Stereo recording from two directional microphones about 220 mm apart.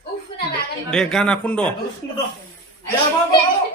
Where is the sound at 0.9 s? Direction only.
5° left (ahead or behind).